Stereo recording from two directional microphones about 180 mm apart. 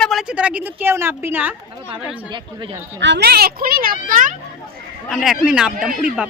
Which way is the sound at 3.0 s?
70° right (ahead or behind).